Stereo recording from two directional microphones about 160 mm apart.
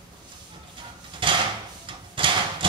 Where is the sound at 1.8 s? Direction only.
30° right (ahead or behind).